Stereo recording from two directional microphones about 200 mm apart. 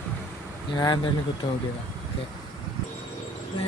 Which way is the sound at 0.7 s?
20° left (ahead or behind).